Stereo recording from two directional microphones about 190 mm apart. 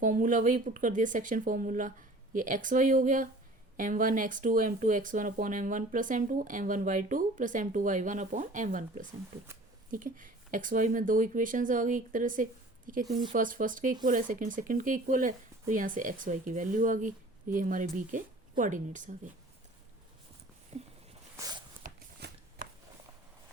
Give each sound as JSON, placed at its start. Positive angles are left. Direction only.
{"t": 0.0, "sound": "speech", "side_deg": -45}
{"t": 20.7, "sound": "a sound", "side_deg": -35}
{"t": 21.3, "sound": "walk", "side_deg": -20}
{"t": 21.8, "sound": "shuffling cards", "side_deg": -45}
{"t": 22.2, "sound": "shuffling cards", "side_deg": -60}
{"t": 22.6, "sound": "a sound", "side_deg": -45}